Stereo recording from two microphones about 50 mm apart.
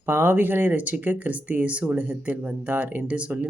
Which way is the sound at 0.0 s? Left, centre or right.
Right.